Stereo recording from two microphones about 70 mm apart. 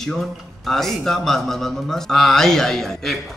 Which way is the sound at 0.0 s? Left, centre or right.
Centre.